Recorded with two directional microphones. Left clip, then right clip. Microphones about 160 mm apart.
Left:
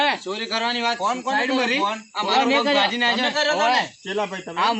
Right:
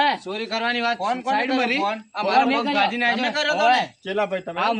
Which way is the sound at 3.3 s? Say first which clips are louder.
Right 1 dB; 10° right (ahead or behind).